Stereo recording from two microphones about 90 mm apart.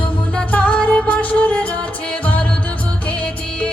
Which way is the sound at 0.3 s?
15° left (ahead or behind).